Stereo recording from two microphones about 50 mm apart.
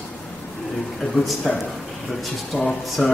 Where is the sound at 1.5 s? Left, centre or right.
Centre.